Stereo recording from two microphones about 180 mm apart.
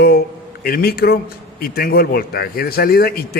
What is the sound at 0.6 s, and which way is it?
A man's voice, 60° left (ahead or behind).